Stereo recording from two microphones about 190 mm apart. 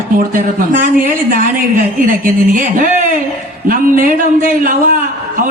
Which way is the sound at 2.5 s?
45° right (ahead or behind).